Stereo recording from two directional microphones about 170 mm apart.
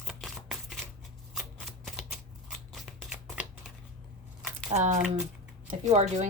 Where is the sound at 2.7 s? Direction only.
5° right (ahead or behind).